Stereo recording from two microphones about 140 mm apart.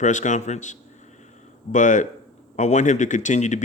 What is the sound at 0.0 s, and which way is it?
Speech, 60° left (ahead or behind).